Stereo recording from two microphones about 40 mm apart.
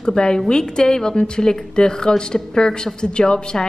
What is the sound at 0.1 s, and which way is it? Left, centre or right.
A woman's voice, left.